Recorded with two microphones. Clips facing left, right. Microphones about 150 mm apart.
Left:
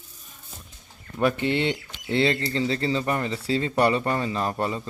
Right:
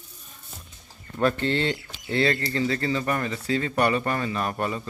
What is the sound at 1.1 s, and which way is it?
Speech, 15° left (ahead or behind).